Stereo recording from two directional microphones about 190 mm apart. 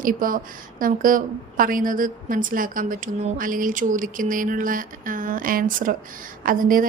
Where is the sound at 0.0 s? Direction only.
45° right (ahead or behind).